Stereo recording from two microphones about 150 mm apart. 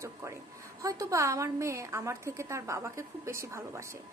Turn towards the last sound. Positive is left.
turn(degrees=-20)  # may be behind; listen again after turning